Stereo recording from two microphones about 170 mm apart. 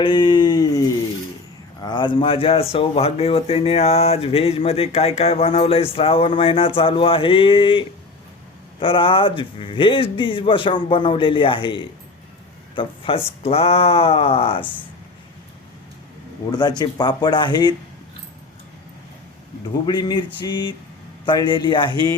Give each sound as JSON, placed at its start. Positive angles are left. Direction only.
{"t": 0.0, "sound": "speech", "side_deg": 30}
{"t": 16.5, "sound": "speech", "side_deg": 25}
{"t": 19.8, "sound": "speech", "side_deg": 25}